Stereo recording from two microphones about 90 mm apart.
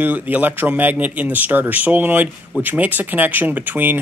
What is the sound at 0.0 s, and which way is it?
Speech, 20° right (ahead or behind).